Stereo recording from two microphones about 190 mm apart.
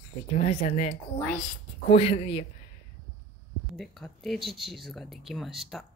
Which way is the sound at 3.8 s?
Centre (ahead or behind).